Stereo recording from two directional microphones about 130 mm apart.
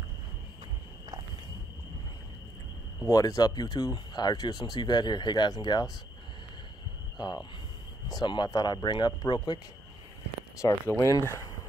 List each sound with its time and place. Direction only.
3.1 s speech: 25° left (ahead or behind)
7.2 s speech: 35° left (ahead or behind)
10.6 s speech: 20° left (ahead or behind)